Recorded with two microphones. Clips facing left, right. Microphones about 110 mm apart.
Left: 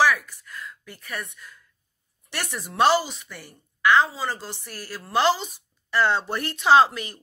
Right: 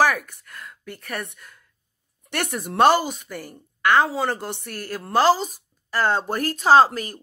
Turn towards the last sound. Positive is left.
turn(degrees=-40)  # may be behind; listen again after turning